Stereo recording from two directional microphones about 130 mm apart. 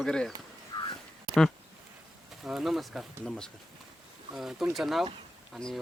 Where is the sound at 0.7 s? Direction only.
35° left (ahead or behind).